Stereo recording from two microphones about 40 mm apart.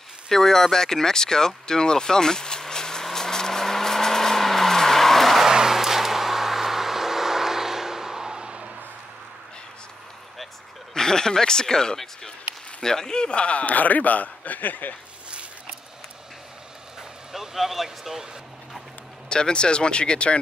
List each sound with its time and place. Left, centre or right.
0.3 s a sound: centre
5.4 s vehicle: centre
11.0 s speech: centre; by 15.0 s left
17.3 s speech: centre
19.2 s speech: left